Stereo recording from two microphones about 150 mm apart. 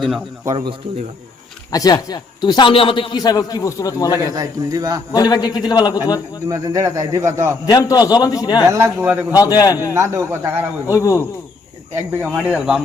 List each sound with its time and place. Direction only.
0.4 s speech: 30° right (ahead or behind)
1.7 s a man's voice: 25° left (ahead or behind)
4.4 s speech: 25° right (ahead or behind)
5.1 s a man's voice: 25° left (ahead or behind)
6.5 s speech: 20° right (ahead or behind)
7.7 s a man's voice: 25° left (ahead or behind)
8.7 s a man's voice: 15° right (ahead or behind)
9.3 s a man's voice: 25° left (ahead or behind)
9.9 s a man's voice: 20° right (ahead or behind)
10.8 s a man's voice: 20° left (ahead or behind)
12.1 s a man's voice: 10° right (ahead or behind)